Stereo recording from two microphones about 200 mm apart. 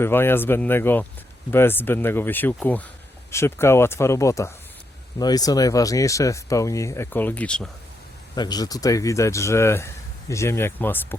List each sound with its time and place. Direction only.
0.0 s speech: 10° left (ahead or behind)
8.4 s speech: 20° left (ahead or behind)